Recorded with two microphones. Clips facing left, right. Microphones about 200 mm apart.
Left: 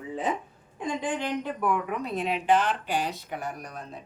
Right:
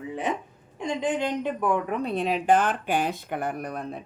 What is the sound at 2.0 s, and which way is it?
Speech, 35° right (ahead or behind).